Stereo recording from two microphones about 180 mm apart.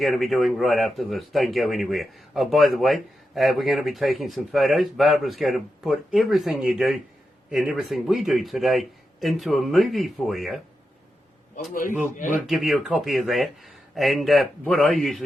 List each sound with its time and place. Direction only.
0.0 s speech: centre (ahead or behind)
11.7 s speech: 50° left (ahead or behind)
12.5 s speech: centre (ahead or behind)